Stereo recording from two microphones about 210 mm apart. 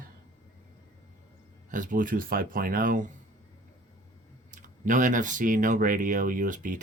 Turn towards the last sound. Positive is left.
turn(degrees=-40)  # may be behind; listen again after turning